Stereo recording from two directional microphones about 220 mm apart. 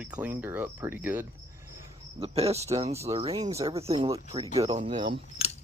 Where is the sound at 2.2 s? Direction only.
25° right (ahead or behind).